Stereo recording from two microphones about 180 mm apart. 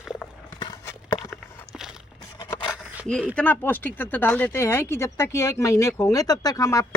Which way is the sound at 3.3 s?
10° left (ahead or behind).